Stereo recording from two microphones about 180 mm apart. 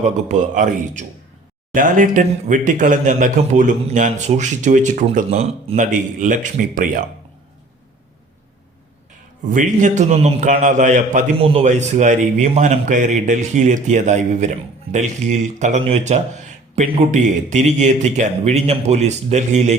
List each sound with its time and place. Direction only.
0.0 s a man's voice: 45° right (ahead or behind)
9.5 s a man's voice: 45° right (ahead or behind)